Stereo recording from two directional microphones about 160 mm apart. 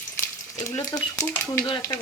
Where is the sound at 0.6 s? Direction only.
20° left (ahead or behind).